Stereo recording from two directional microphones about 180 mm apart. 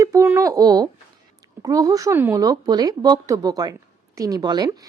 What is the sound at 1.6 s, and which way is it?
A woman's voice, 20° right (ahead or behind).